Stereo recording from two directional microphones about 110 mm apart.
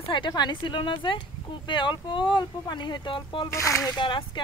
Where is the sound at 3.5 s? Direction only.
25° left (ahead or behind).